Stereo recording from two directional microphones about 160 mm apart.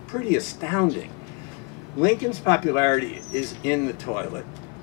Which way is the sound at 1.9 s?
20° left (ahead or behind).